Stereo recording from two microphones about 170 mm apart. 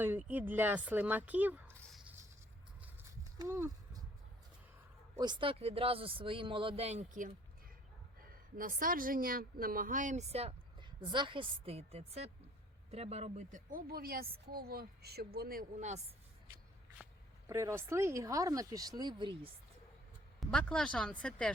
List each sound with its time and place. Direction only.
0.0 s speech: 10° right (ahead or behind)
3.3 s a sound: 20° right (ahead or behind)
5.1 s speech: 25° right (ahead or behind); by 15.6 s 65° right (ahead or behind)
17.4 s speech: 15° right (ahead or behind)
20.4 s speech: 5° left (ahead or behind)